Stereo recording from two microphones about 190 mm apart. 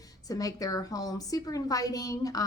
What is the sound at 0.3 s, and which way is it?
A woman's voice, 20° left (ahead or behind).